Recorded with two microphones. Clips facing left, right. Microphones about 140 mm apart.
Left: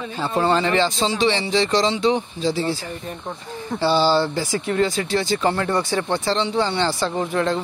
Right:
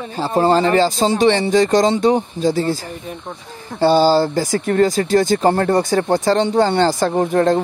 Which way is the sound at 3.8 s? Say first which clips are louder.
Right 5 dB; 45° right (ahead or behind).